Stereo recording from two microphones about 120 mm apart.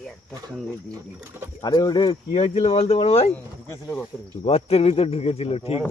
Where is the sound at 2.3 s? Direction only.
70° left (ahead or behind).